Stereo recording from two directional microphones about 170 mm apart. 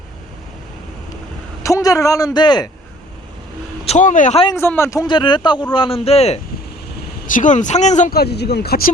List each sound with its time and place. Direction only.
1.6 s a man's voice: 20° left (ahead or behind)
3.8 s speech: 45° left (ahead or behind)
4.5 s a man's voice: 15° left (ahead or behind); by 6.4 s 40° left (ahead or behind)
7.3 s speech: 50° left (ahead or behind)
8.1 s speech: 70° left (ahead or behind)